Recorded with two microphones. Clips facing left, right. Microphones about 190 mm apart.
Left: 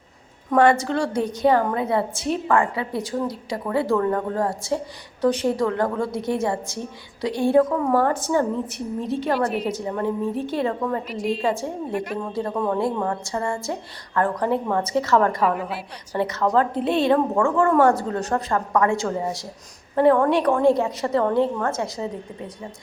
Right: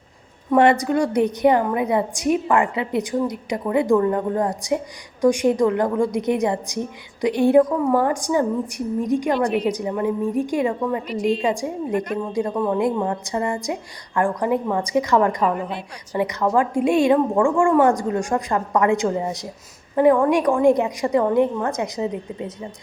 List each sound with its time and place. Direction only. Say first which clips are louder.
0.5 s a woman's voice: right 2 dB; 20° right (ahead or behind)
11.1 s a woman's voice: right 4 dB; centre (ahead or behind)
11.4 s a woman's voice: right 2 dB; 15° right (ahead or behind)
15.4 s a woman's voice: right 1 dB; 5° left (ahead or behind)
16.1 s a woman's voice: right 1 dB; 15° right (ahead or behind)